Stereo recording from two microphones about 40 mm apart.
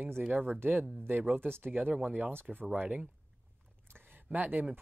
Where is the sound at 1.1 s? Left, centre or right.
Right.